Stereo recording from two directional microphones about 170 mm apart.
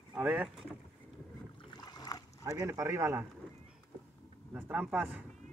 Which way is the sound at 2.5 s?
20° right (ahead or behind).